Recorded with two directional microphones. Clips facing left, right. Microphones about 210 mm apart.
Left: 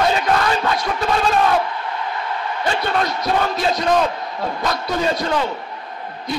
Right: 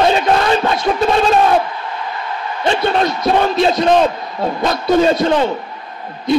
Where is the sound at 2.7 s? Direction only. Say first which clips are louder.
Right 6 dB; 25° right (ahead or behind).